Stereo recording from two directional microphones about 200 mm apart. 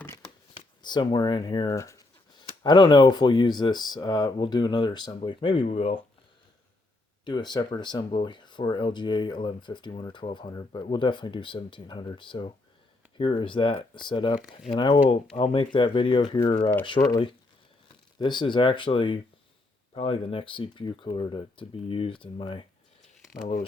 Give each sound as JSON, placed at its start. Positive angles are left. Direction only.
{"t": 0.5, "sound": "speech", "side_deg": 20}
{"t": 7.3, "sound": "speech", "side_deg": 20}
{"t": 23.3, "sound": "speech", "side_deg": 40}